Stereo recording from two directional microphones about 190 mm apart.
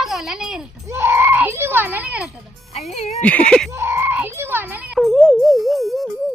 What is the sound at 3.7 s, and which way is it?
Music, 15° right (ahead or behind).